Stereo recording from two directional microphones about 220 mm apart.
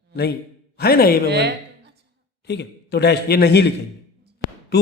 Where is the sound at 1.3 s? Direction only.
50° right (ahead or behind).